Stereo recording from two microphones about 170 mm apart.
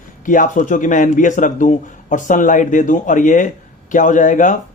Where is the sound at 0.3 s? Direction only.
50° left (ahead or behind).